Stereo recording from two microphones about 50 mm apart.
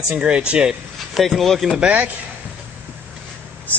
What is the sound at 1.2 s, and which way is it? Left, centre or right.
Speech, centre.